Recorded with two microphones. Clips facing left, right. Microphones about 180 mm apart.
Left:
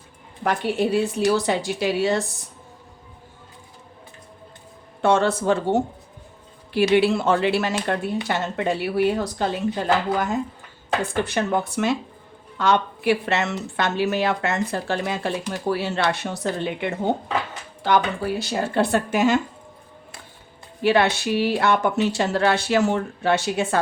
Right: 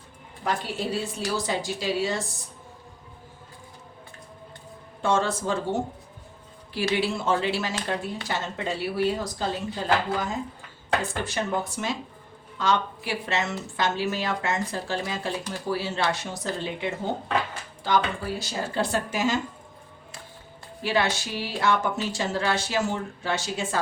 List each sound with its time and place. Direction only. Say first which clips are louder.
0.4 s speech: left 7 dB; 60° left (ahead or behind)
5.0 s speech: left 6 dB; 65° left (ahead or behind)
6.9 s speech: left 6 dB; 65° left (ahead or behind)
20.8 s speech: left 7 dB; 60° left (ahead or behind)